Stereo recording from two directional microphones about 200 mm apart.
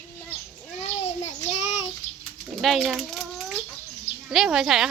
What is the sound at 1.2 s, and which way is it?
Child singing, 35° left (ahead or behind).